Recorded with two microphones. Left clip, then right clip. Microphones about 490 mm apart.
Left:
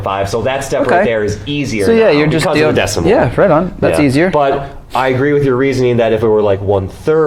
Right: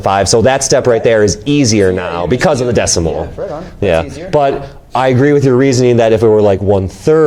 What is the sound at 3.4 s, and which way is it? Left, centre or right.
Speech, left.